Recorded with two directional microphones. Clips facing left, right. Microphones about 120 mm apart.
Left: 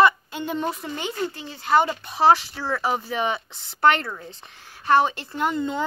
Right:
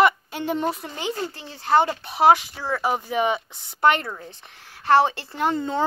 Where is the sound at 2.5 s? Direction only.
15° right (ahead or behind).